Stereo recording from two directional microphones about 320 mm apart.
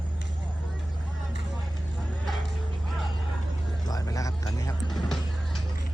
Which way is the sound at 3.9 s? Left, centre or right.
Centre.